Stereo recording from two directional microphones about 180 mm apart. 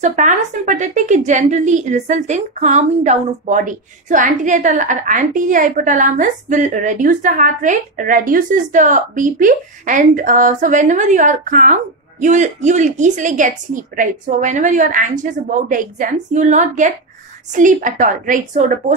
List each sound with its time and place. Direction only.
0.0 s a woman's voice: 45° right (ahead or behind)